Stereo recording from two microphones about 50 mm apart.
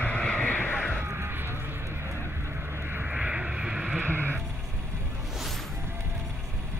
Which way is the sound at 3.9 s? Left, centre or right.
Right.